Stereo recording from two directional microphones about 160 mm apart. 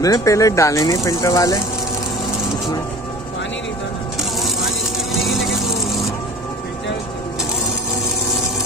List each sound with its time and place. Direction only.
0.0 s speech: 20° left (ahead or behind)
5.1 s vehicle: centre (ahead or behind)